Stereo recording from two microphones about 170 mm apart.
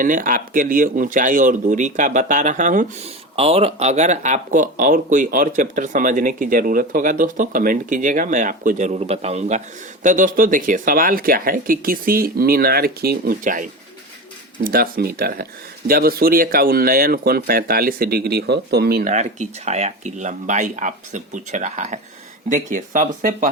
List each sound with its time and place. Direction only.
0.0 s speech: 55° right (ahead or behind)
3.3 s speech: 35° right (ahead or behind)
14.6 s speech: 60° right (ahead or behind)
19.1 s speech: 45° right (ahead or behind)